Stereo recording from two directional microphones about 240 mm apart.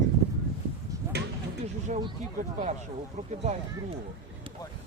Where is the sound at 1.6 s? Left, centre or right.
Right.